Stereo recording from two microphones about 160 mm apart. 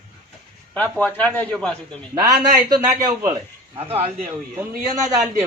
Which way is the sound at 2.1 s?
25° right (ahead or behind).